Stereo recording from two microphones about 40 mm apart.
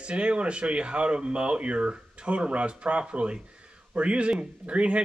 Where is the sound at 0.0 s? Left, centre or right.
Right.